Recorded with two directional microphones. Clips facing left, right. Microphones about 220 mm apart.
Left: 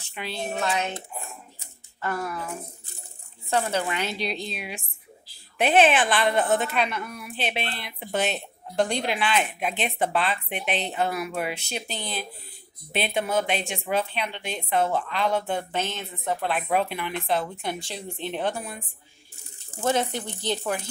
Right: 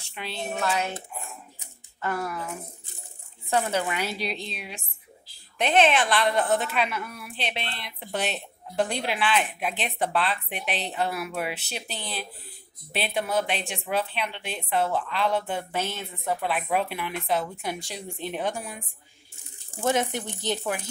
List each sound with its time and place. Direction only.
0.0 s a woman's voice: centre (ahead or behind)
1.6 s a sound: 10° right (ahead or behind)
3.4 s a woman's voice: 15° right (ahead or behind)